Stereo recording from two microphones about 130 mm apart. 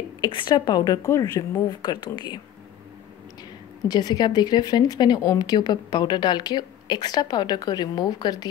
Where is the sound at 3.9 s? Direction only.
30° left (ahead or behind).